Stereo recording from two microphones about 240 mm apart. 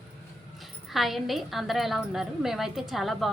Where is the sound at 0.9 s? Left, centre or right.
Centre.